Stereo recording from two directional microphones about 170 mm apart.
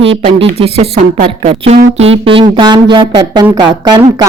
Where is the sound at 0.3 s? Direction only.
35° right (ahead or behind).